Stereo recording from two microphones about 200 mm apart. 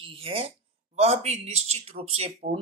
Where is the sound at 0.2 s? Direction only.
30° right (ahead or behind).